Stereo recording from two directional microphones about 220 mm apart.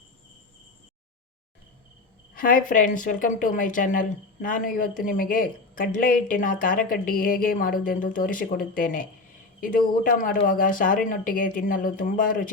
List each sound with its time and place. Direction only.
2.3 s a woman's voice: 40° left (ahead or behind)